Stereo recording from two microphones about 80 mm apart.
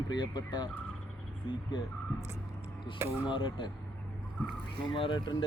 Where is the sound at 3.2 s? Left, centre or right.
Left.